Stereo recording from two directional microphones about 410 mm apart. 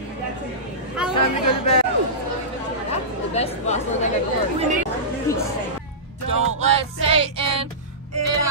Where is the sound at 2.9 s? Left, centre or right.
Centre.